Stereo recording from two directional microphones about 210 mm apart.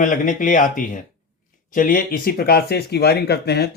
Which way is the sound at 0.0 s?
40° left (ahead or behind).